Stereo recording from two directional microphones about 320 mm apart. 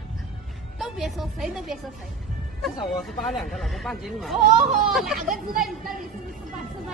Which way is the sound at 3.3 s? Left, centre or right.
Centre.